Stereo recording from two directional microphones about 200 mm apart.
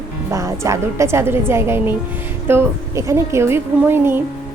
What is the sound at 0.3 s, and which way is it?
A woman's voice, 15° right (ahead or behind).